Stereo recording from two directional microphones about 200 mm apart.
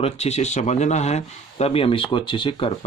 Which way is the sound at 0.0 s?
30° left (ahead or behind).